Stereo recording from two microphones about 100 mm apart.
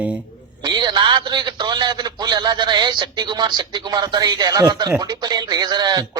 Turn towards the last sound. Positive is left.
turn(degrees=-45)  # may be behind; listen again after turning